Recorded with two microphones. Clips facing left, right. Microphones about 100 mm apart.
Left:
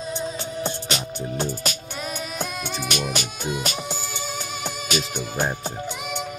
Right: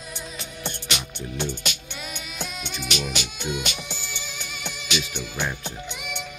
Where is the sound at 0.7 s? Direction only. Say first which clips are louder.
Left 4 dB; 35° left (ahead or behind).